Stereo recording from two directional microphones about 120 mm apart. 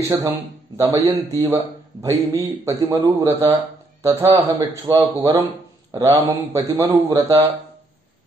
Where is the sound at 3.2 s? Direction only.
20° right (ahead or behind).